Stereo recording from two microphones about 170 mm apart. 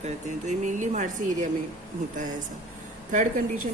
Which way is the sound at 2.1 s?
50° right (ahead or behind).